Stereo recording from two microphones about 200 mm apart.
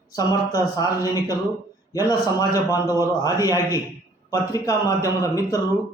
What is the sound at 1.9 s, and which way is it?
A man's voice, 20° left (ahead or behind).